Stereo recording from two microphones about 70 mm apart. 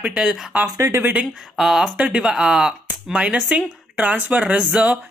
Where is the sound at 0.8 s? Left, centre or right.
Right.